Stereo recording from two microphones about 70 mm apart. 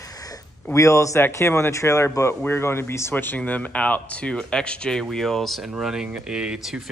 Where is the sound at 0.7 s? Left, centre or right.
Left.